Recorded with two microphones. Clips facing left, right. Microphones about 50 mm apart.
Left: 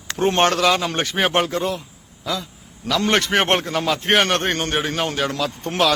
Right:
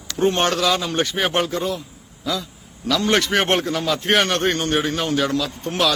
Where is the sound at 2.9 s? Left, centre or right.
Left.